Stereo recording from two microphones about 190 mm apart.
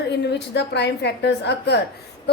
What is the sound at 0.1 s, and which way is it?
A woman's voice, 60° left (ahead or behind).